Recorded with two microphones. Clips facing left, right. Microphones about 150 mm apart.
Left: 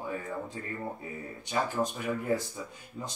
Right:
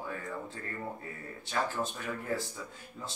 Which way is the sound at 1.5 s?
15° left (ahead or behind).